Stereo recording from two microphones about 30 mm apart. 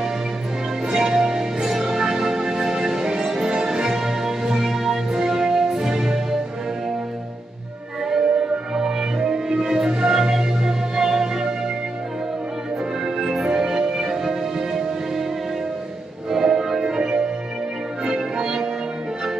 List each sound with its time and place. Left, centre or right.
0.8 s music: centre
8.1 s music: centre
13.0 s music: centre
16.3 s music: centre
16.8 s music: right